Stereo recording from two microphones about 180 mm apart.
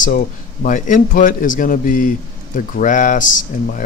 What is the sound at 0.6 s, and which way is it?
Speech, 45° left (ahead or behind).